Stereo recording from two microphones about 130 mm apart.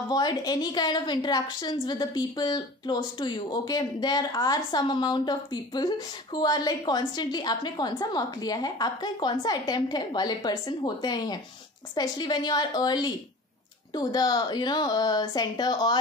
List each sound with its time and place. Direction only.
0.1 s a woman's voice: 30° left (ahead or behind)